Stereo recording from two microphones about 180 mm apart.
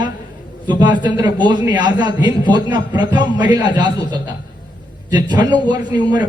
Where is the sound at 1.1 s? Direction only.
25° right (ahead or behind).